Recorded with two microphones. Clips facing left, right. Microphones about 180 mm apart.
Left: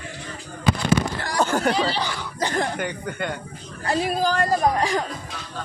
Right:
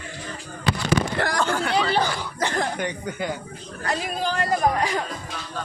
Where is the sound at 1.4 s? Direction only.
45° left (ahead or behind).